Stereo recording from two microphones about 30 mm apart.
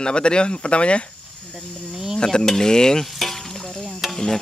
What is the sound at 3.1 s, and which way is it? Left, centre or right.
Music, centre.